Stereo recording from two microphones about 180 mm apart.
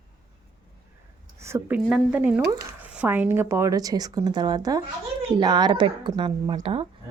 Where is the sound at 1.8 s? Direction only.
5° right (ahead or behind).